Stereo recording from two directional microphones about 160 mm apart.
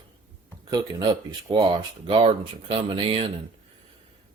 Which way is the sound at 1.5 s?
30° right (ahead or behind).